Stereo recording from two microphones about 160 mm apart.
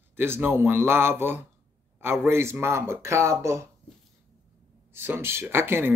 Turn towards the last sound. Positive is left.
turn(degrees=-15)  # may be behind; listen again after turning